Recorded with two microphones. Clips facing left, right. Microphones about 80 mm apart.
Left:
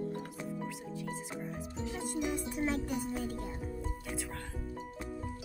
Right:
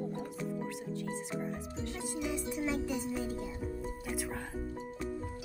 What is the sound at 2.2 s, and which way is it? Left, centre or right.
Music, left.